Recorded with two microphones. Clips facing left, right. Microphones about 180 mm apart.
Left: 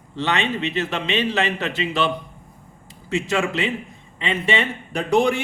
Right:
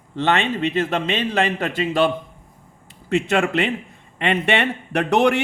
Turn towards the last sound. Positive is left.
turn(degrees=-70)  # may be behind; listen again after turning